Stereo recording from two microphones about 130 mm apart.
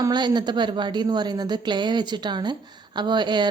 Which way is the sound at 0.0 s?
35° right (ahead or behind).